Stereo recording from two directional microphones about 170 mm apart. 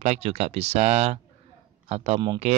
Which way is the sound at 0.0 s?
40° right (ahead or behind).